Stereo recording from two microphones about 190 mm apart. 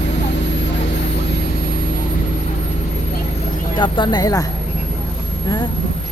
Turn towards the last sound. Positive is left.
turn(degrees=20)  # may be behind; listen again after turning